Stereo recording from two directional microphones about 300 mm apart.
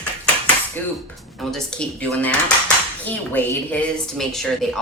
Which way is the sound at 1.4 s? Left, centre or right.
Centre.